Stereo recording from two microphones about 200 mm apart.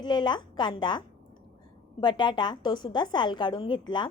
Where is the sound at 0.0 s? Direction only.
20° left (ahead or behind).